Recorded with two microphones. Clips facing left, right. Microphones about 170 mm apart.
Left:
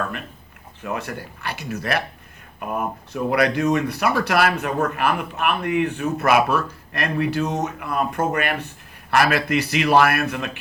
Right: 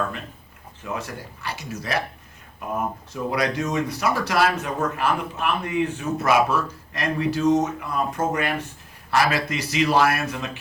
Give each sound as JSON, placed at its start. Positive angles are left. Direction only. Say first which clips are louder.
{"t": 0.9, "sound": "speech", "louder": "left 3 dB", "side_deg": 60}
{"t": 3.1, "sound": "speech", "louder": "left 6 dB", "side_deg": 60}